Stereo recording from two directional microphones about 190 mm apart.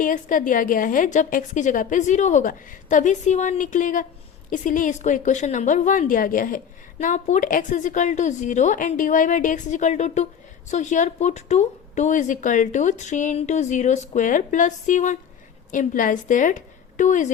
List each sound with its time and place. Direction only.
0.0 s a woman's voice: 45° left (ahead or behind)